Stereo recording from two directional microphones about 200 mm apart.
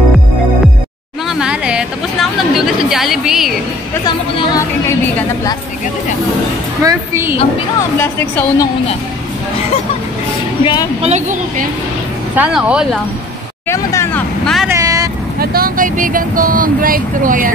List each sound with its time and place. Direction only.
1.4 s a woman's voice: 5° right (ahead or behind)
6.8 s a woman's voice: 15° right (ahead or behind)
8.0 s speech: 10° left (ahead or behind)
10.6 s a woman's voice: 20° left (ahead or behind)
11.0 s a woman's voice: 35° right (ahead or behind)
12.4 s a woman's voice: 5° right (ahead or behind)
13.7 s speech: 15° left (ahead or behind)
14.7 s vehicle: 15° right (ahead or behind)
15.3 s speech: 45° right (ahead or behind)